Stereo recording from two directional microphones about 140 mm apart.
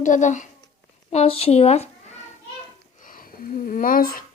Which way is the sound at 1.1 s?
45° left (ahead or behind).